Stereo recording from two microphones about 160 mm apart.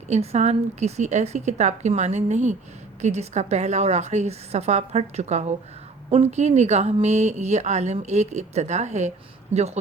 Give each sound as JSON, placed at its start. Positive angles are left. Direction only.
{"t": 0.1, "sound": "speech", "side_deg": -40}